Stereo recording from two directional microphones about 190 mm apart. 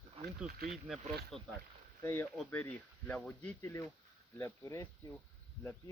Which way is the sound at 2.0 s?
10° left (ahead or behind).